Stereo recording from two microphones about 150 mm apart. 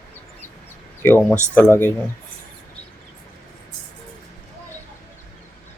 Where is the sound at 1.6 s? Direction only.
15° left (ahead or behind).